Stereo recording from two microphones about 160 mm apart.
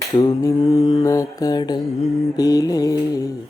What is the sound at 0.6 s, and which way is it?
Mantra, 35° left (ahead or behind).